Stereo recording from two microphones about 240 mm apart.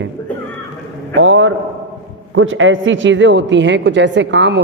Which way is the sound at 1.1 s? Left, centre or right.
Right.